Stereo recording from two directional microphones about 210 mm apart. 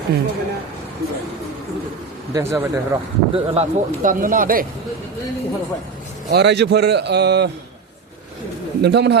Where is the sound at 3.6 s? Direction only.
40° right (ahead or behind).